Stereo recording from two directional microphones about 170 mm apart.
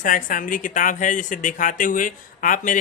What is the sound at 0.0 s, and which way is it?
A woman's voice, 50° left (ahead or behind).